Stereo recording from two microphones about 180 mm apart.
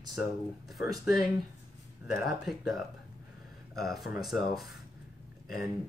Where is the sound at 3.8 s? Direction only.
Centre (ahead or behind).